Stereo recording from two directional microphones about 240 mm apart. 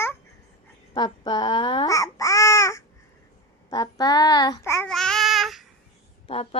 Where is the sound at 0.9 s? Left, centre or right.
Centre.